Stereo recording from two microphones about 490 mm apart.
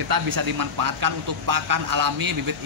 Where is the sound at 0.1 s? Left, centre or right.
Right.